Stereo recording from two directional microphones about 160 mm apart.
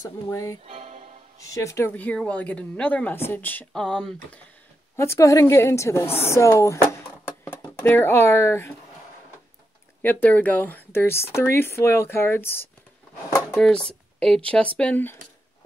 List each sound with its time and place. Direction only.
0.3 s speech: 20° left (ahead or behind)
0.7 s music: 45° right (ahead or behind)
1.4 s speech: 20° left (ahead or behind)
4.9 s speech: 15° left (ahead or behind)
10.0 s speech: 10° left (ahead or behind)